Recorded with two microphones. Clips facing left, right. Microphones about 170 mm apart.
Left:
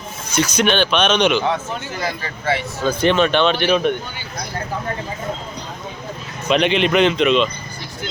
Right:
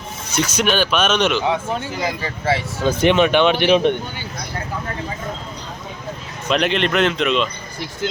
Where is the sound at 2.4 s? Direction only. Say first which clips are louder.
Right 1 dB; 30° right (ahead or behind).